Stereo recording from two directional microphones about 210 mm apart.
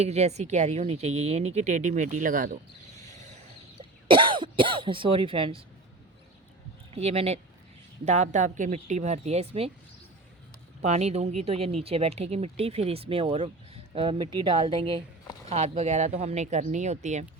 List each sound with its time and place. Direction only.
0.0 s speech: 30° right (ahead or behind)
4.1 s speech: 25° right (ahead or behind)
6.9 s speech: 30° right (ahead or behind)
10.8 s speech: 30° right (ahead or behind)